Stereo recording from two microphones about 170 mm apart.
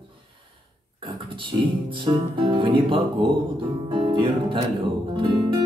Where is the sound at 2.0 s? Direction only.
30° right (ahead or behind).